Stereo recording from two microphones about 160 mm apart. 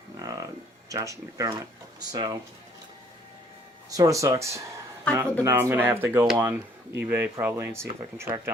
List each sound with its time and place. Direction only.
0.2 s a sound: 20° right (ahead or behind)
0.9 s speech: 20° right (ahead or behind)
3.8 s speech: 20° right (ahead or behind)
5.1 s speech: 10° left (ahead or behind)
5.4 s speech: 15° right (ahead or behind)